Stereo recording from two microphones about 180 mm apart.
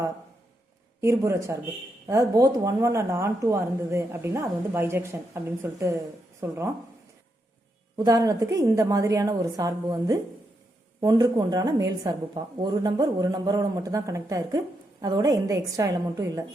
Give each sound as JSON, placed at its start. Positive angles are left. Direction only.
{"t": 1.0, "sound": "a woman's voice", "side_deg": -15}
{"t": 7.9, "sound": "a woman's voice", "side_deg": -20}